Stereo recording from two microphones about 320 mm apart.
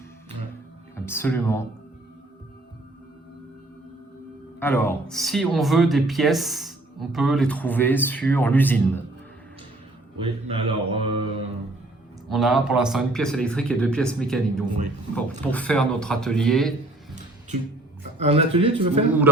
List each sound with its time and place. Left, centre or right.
0.9 s speech: centre
4.6 s speech: centre
10.2 s speech: centre
12.3 s speech: centre
18.2 s speech: centre